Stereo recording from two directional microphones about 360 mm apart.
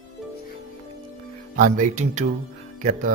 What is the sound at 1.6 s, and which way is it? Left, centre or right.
Speech, right.